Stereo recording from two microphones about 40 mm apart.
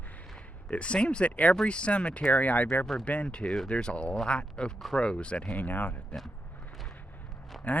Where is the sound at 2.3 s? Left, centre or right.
Left.